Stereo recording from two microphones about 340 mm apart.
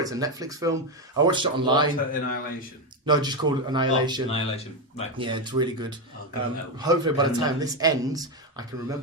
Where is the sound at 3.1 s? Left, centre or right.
Centre.